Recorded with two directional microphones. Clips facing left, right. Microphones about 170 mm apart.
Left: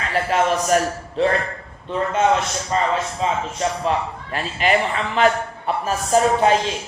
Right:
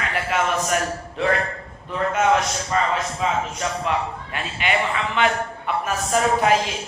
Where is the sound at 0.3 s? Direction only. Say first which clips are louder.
Left 4 dB; 35° left (ahead or behind).